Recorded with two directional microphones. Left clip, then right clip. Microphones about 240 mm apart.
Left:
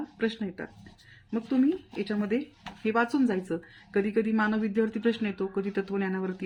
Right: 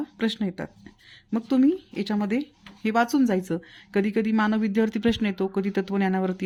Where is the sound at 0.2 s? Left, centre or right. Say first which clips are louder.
Right 2 dB; right.